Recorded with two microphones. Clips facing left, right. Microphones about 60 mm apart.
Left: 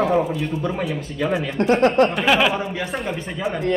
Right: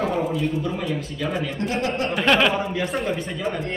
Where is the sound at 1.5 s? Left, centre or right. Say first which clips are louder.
Left 8 dB; left.